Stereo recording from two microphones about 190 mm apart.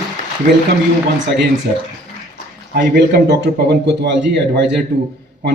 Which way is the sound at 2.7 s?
60° right (ahead or behind).